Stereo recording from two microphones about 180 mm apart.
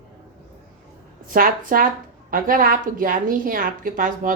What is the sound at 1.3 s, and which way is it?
Speech, 50° right (ahead or behind).